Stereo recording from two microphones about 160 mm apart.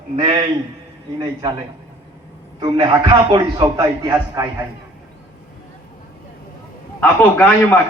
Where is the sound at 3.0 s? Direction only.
30° right (ahead or behind).